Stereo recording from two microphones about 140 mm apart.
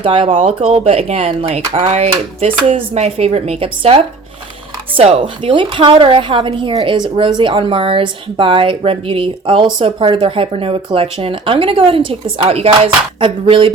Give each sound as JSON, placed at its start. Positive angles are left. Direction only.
{"t": 0.0, "sound": "speech", "side_deg": -40}